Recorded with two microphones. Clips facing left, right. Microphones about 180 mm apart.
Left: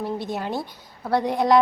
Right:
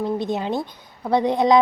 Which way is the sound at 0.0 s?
20° right (ahead or behind).